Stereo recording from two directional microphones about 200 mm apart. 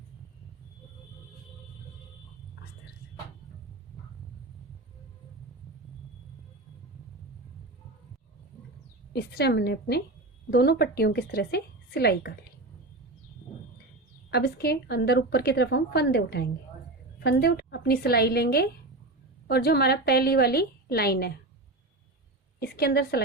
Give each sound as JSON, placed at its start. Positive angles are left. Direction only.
{"t": 9.1, "sound": "a woman's voice", "side_deg": 55}
{"t": 14.3, "sound": "a woman's voice", "side_deg": 50}
{"t": 22.6, "sound": "a woman's voice", "side_deg": 50}